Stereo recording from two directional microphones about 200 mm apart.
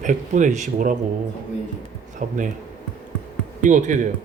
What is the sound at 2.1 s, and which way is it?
Speech, 40° right (ahead or behind).